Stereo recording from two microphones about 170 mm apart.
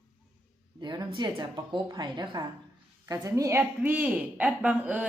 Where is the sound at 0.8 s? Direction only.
25° right (ahead or behind).